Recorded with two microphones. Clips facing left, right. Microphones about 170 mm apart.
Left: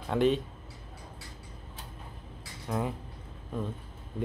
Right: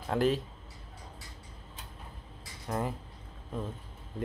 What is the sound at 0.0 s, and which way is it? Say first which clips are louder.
Speech: left 2 dB; centre (ahead or behind).